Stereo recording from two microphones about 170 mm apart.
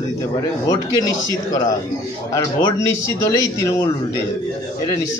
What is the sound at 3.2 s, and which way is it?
Speech, 20° left (ahead or behind).